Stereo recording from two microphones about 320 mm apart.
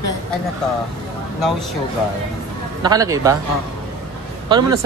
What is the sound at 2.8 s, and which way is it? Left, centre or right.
Speech, centre.